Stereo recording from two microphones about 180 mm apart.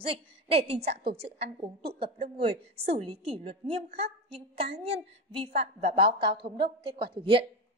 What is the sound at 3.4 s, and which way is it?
A woman's voice, 35° right (ahead or behind).